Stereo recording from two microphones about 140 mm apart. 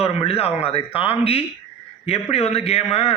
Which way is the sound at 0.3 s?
45° left (ahead or behind).